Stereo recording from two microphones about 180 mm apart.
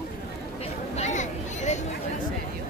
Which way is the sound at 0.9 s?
40° left (ahead or behind).